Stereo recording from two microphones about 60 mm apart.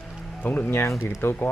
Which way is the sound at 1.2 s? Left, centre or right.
Left.